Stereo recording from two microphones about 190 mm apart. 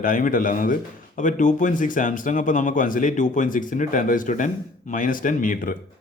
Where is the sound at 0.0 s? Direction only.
45° left (ahead or behind).